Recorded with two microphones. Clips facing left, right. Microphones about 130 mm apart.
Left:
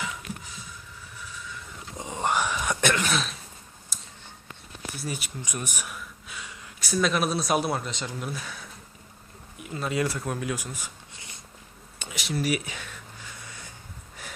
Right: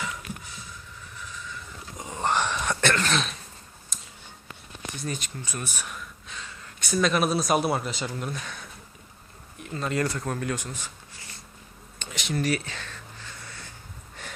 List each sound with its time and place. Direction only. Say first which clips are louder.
2.0 s dog: even; 20° left (ahead or behind)
3.9 s a sound: even; 5° left (ahead or behind)
4.9 s speech: right 1 dB; 10° left (ahead or behind)
6.7 s speech: right 1 dB; centre (ahead or behind)
11.1 s writing: even; 20° left (ahead or behind)
11.9 s a sound: right 1 dB; 10° left (ahead or behind)